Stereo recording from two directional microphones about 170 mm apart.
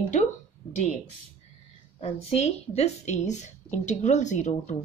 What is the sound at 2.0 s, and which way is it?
A woman's voice, 40° left (ahead or behind).